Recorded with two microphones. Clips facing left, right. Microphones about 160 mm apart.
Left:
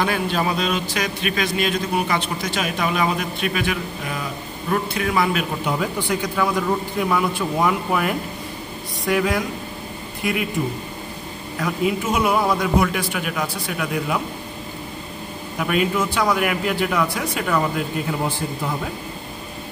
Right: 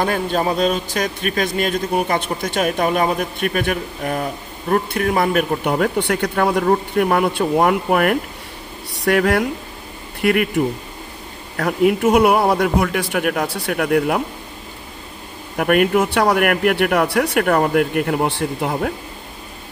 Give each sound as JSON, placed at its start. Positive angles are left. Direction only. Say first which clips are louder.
{"t": 0.0, "sound": "a man's voice", "louder": "right 3 dB", "side_deg": -45}
{"t": 11.5, "sound": "speech", "louder": "right 6 dB", "side_deg": -65}
{"t": 15.5, "sound": "speech", "louder": "right 6 dB", "side_deg": -60}